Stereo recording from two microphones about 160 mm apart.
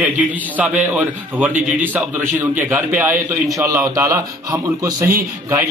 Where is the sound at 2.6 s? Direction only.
15° right (ahead or behind).